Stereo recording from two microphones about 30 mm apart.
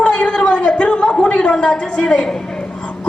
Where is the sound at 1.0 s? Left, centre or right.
Left.